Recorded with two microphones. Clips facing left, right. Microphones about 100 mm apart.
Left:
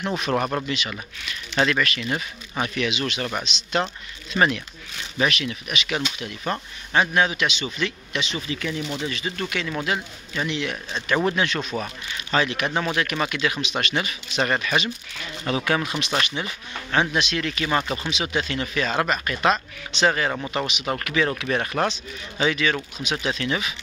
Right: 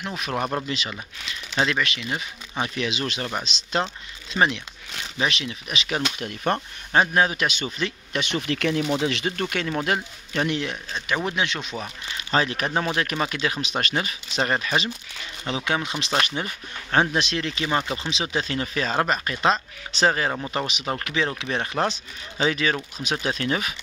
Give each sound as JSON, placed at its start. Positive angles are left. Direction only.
{"t": 0.0, "sound": "speech", "side_deg": 0}
{"t": 1.7, "sound": "speech", "side_deg": -20}
{"t": 2.6, "sound": "speech", "side_deg": -30}
{"t": 5.2, "sound": "speech", "side_deg": -25}
{"t": 6.0, "sound": "speech", "side_deg": -50}
{"t": 8.2, "sound": "speech", "side_deg": -65}
{"t": 9.4, "sound": "a man's voice", "side_deg": -45}
{"t": 11.2, "sound": "speech", "side_deg": -20}
{"t": 12.3, "sound": "speech", "side_deg": -35}
{"t": 16.2, "sound": "speech", "side_deg": -40}
{"t": 20.8, "sound": "speech", "side_deg": -20}
{"t": 22.4, "sound": "speech", "side_deg": -35}